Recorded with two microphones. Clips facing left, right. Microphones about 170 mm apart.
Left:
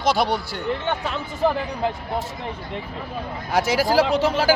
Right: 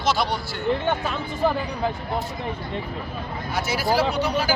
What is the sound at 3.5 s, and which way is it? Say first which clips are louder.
Speech: left 4 dB; 90° left.